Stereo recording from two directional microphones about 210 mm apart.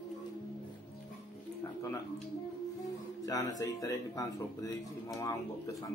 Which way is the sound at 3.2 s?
15° left (ahead or behind).